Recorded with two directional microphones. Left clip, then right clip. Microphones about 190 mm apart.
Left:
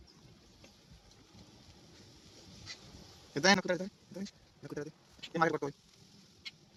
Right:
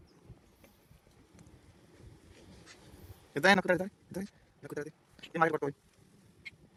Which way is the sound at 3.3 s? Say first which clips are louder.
Right 3 dB; 60° right (ahead or behind).